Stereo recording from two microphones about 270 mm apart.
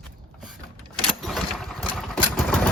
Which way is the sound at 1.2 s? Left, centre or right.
Centre.